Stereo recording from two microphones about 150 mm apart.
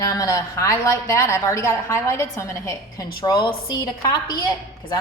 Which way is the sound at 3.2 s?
30° left (ahead or behind).